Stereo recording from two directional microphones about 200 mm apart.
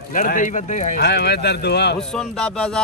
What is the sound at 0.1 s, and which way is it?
Speech, 40° left (ahead or behind).